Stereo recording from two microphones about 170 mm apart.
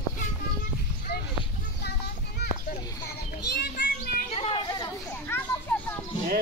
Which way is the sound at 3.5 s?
65° left (ahead or behind).